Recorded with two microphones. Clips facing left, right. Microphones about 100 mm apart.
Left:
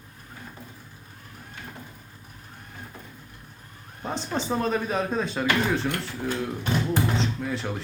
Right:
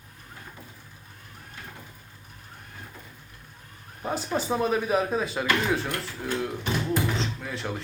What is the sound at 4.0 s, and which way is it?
Speech, 5° right (ahead or behind).